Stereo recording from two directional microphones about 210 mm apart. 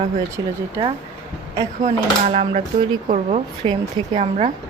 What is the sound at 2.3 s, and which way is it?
Speech, 30° right (ahead or behind).